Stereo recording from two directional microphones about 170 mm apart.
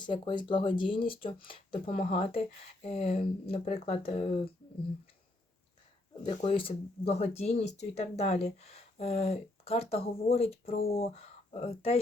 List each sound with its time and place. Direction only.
0.0 s speech: 30° left (ahead or behind)
6.3 s speech: 35° left (ahead or behind)